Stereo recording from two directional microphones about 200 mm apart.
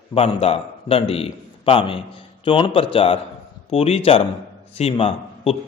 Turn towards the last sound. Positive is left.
turn(degrees=30)  # may be behind; listen again after turning